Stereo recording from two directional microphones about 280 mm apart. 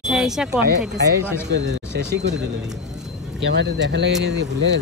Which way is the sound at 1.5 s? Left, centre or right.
Right.